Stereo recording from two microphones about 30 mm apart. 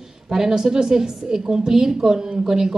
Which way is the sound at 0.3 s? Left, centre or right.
Centre.